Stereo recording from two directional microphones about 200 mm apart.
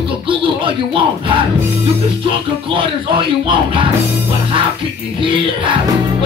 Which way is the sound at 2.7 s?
25° right (ahead or behind).